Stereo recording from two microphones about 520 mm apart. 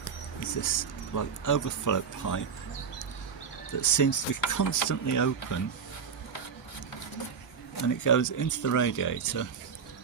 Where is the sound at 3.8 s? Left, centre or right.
Left.